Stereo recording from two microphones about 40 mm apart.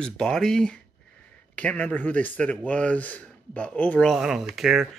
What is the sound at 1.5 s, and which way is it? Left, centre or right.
Speech, left.